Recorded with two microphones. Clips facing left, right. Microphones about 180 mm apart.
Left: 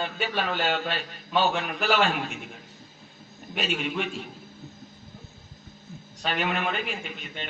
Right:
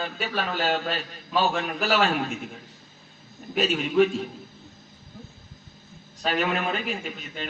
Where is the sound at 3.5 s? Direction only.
40° right (ahead or behind).